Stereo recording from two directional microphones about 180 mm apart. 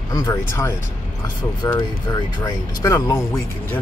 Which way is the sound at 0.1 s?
15° left (ahead or behind).